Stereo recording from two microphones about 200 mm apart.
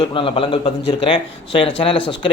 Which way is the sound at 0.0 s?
25° left (ahead or behind).